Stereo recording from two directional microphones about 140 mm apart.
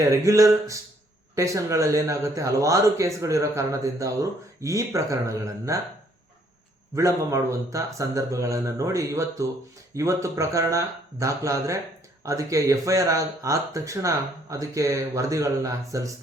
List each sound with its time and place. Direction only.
0.1 s speech: 20° right (ahead or behind)
6.9 s speech: 20° right (ahead or behind)